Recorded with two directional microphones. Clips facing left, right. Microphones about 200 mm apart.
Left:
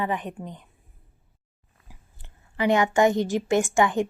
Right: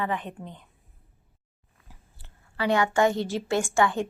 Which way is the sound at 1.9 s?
15° left (ahead or behind).